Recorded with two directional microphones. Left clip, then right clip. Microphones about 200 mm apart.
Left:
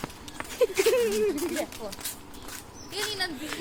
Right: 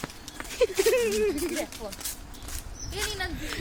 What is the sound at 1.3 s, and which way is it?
Speech, centre (ahead or behind).